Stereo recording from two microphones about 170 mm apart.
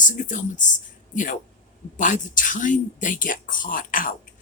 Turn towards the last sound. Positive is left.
turn(degrees=55)  # may be behind; listen again after turning